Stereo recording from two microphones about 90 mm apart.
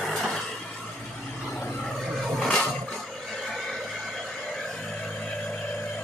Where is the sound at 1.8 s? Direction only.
5° left (ahead or behind).